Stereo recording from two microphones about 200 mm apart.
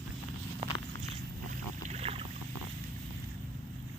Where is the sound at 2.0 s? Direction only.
30° right (ahead or behind).